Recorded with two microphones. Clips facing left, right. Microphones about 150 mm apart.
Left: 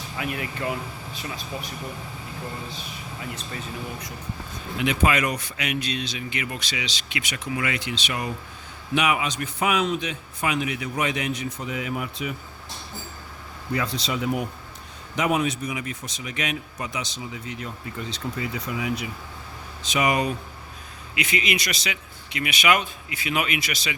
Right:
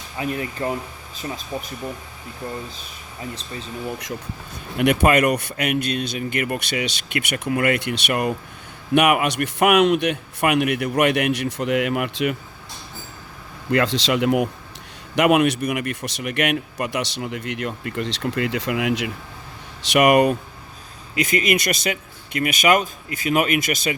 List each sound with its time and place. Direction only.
0.2 s speech: 35° right (ahead or behind)
4.8 s speech: 60° right (ahead or behind); by 12.4 s 85° right
13.7 s speech: 85° right
15.1 s speech: 70° right (ahead or behind); by 19.1 s 85° right
19.8 s speech: 70° right (ahead or behind)
21.2 s speech: 45° right (ahead or behind)